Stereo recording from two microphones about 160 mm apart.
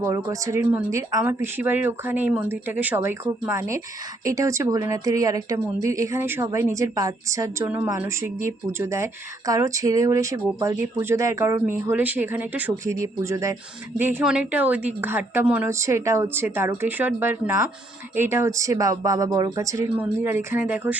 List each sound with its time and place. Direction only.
0.0 s speech: 20° right (ahead or behind)